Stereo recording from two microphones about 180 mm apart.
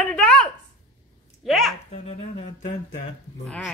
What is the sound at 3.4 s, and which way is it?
Speech, 5° left (ahead or behind).